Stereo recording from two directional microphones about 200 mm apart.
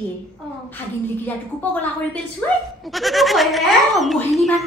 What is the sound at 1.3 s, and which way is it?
A woman's voice, 5° left (ahead or behind).